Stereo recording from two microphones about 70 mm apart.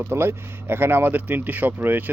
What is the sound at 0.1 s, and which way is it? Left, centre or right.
Speech, right.